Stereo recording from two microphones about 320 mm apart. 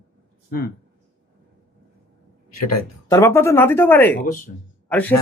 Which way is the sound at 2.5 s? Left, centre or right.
Left.